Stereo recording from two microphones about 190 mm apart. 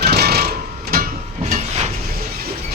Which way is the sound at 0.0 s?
55° right (ahead or behind).